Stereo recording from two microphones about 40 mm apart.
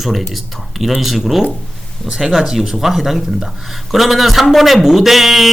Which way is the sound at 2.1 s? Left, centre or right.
Right.